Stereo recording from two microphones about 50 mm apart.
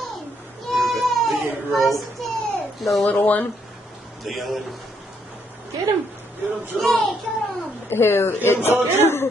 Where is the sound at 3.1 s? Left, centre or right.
Left.